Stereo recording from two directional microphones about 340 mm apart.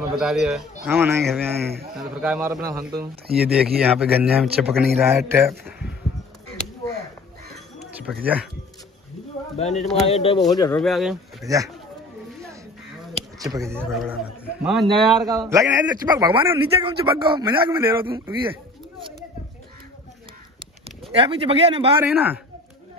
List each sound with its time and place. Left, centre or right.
0.2 s a man's voice: centre
7.8 s a sound: centre
9.6 s speech: centre
10.8 s a man's voice: centre
13.1 s a man's voice: centre
21.1 s a man's voice: centre
22.0 s a man's voice: centre